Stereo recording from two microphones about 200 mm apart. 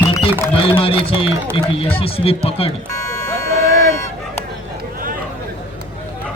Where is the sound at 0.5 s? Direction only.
25° left (ahead or behind).